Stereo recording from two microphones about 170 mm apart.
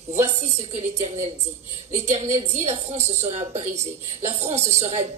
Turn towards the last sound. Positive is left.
turn(degrees=-40)  # may be behind; listen again after turning